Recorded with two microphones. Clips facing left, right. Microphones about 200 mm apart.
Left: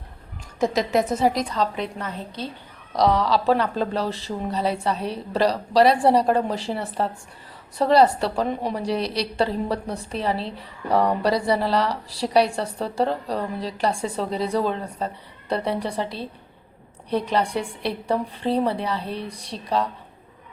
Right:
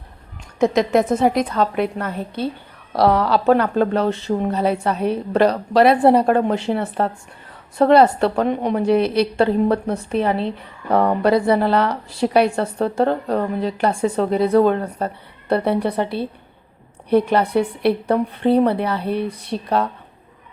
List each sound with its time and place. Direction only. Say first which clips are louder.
1.2 s a woman's voice: right 4 dB; 55° right (ahead or behind)